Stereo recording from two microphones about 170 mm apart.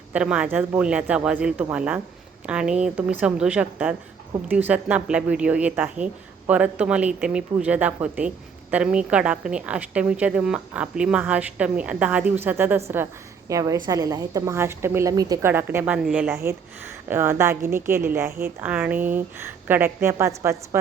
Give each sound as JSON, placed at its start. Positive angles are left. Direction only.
{"t": 0.1, "sound": "a woman's voice", "side_deg": -5}